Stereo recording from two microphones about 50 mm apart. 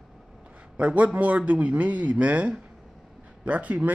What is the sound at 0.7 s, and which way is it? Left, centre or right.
A man's voice, right.